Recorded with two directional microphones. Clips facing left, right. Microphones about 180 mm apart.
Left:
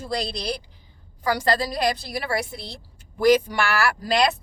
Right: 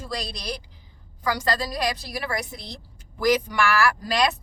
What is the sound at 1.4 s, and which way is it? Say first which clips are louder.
Speech: left 5 dB; 30° left (ahead or behind).